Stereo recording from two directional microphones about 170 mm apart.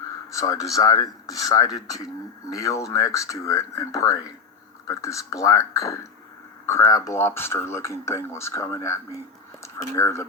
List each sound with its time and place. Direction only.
0.3 s speech: 20° left (ahead or behind)